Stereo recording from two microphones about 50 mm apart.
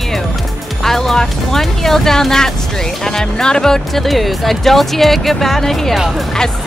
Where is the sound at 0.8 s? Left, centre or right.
Centre.